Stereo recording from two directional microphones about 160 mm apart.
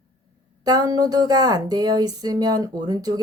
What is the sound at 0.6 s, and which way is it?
Speech, 25° right (ahead or behind).